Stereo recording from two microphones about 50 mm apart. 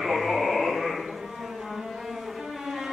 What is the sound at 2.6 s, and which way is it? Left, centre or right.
Music, centre.